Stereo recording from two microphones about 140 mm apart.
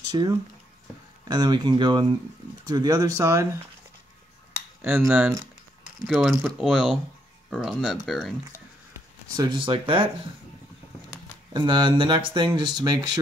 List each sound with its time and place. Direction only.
0.1 s speech: 35° right (ahead or behind)
1.3 s speech: 30° right (ahead or behind)
4.8 s speech: 10° right (ahead or behind)
9.4 s speech: 35° right (ahead or behind)
11.5 s speech: 35° right (ahead or behind)